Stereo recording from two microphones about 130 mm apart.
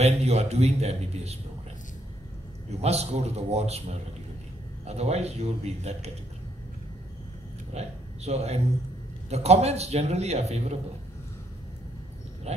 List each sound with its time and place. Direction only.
0.0 s a man's voice: 55° right (ahead or behind)
2.8 s a man's voice: 55° right (ahead or behind)
4.8 s a man's voice: 55° right (ahead or behind)
7.7 s a man's voice: 55° right (ahead or behind)
12.5 s dog: 55° right (ahead or behind)